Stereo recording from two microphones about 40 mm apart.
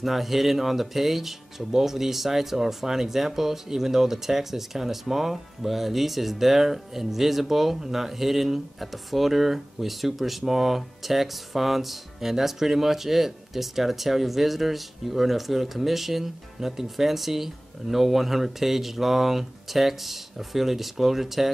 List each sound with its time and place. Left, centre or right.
0.0 s speech: centre